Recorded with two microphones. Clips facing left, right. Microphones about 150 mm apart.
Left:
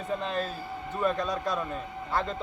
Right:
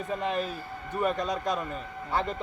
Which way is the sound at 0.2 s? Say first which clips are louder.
Right 1 dB; 15° right (ahead or behind).